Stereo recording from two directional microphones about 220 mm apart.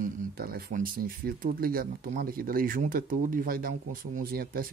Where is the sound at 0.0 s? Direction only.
45° right (ahead or behind).